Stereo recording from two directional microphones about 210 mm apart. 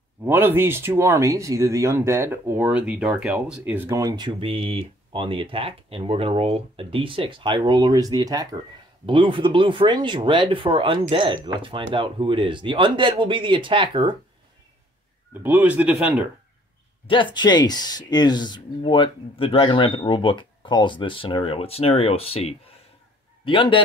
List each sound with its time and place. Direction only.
0.2 s speech: 10° right (ahead or behind)
15.4 s speech: 10° right (ahead or behind)
17.1 s speech: 20° left (ahead or behind)